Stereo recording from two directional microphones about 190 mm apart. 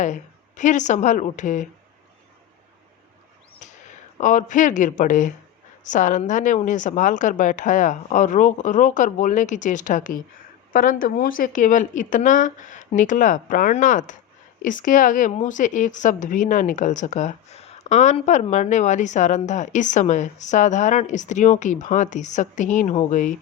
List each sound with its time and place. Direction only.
0.0 s a woman's voice: 40° left (ahead or behind)
3.6 s a woman's voice: 40° left (ahead or behind)